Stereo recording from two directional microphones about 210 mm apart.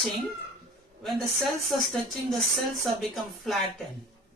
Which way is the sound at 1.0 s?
Centre (ahead or behind).